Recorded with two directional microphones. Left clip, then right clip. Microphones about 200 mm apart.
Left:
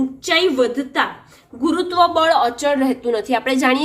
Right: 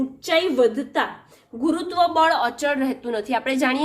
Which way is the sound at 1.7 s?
30° right (ahead or behind).